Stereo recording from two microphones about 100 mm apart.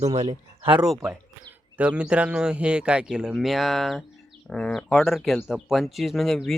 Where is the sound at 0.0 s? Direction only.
75° right (ahead or behind).